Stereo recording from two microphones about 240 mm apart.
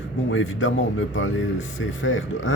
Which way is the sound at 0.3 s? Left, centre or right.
Left.